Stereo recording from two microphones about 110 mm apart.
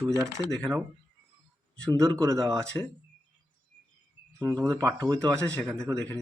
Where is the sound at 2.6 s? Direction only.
10° left (ahead or behind).